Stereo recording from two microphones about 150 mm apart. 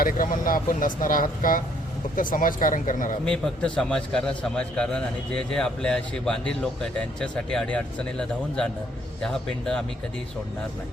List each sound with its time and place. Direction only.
0.0 s speech: 65° left (ahead or behind)
3.2 s a man's voice: 5° left (ahead or behind)